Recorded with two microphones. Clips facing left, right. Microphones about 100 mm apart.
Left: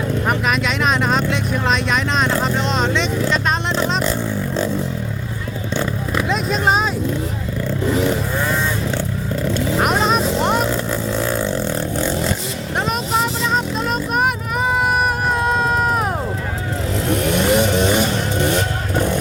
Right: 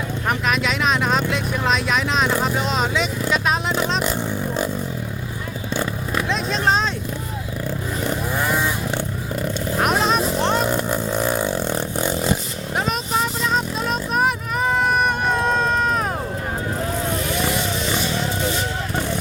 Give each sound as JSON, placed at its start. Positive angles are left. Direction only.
{"t": 0.3, "sound": "vehicle", "side_deg": 0}
{"t": 4.0, "sound": "a sound", "side_deg": -15}
{"t": 6.1, "sound": "vehicle", "side_deg": 5}
{"t": 8.4, "sound": "vehicle", "side_deg": -15}
{"t": 9.7, "sound": "vehicle", "side_deg": 0}
{"t": 10.7, "sound": "vehicle", "side_deg": -15}
{"t": 13.1, "sound": "music", "side_deg": 0}
{"t": 15.3, "sound": "baby cry", "side_deg": 5}
{"t": 17.1, "sound": "music", "side_deg": 65}